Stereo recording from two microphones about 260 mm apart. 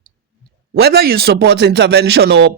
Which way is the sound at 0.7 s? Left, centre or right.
Right.